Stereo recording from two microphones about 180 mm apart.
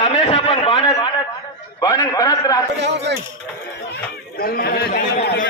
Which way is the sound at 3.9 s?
55° left (ahead or behind).